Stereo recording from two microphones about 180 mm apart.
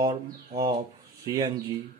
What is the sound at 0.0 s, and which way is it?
Speech, 25° right (ahead or behind).